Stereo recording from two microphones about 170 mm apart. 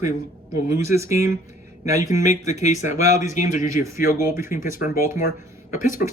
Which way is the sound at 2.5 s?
45° left (ahead or behind).